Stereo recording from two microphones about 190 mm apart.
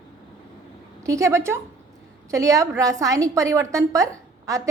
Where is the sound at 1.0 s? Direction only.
15° right (ahead or behind).